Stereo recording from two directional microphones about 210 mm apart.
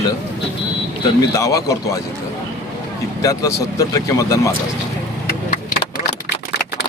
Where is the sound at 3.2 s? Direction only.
15° left (ahead or behind).